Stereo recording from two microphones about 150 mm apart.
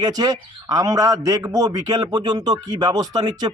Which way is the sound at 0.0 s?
25° right (ahead or behind).